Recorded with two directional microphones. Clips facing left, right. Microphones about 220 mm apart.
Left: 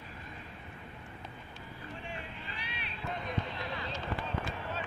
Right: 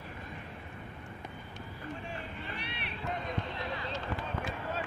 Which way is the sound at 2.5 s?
60° right (ahead or behind).